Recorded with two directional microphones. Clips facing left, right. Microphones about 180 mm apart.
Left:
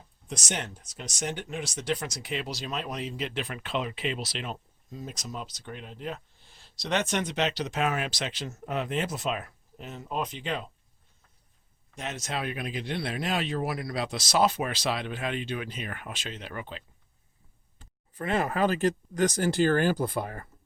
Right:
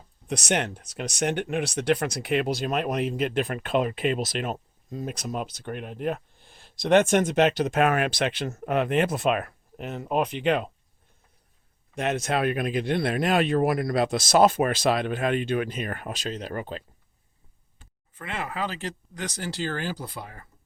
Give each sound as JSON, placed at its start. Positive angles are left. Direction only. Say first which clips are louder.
{"t": 0.3, "sound": "speech", "louder": "right 8 dB", "side_deg": -65}
{"t": 11.9, "sound": "speech", "louder": "right 9 dB", "side_deg": -60}
{"t": 18.1, "sound": "speech", "louder": "left 6 dB", "side_deg": 40}